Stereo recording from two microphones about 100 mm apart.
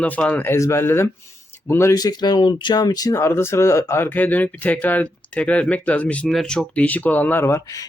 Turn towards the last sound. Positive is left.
turn(degrees=30)  # may be behind; listen again after turning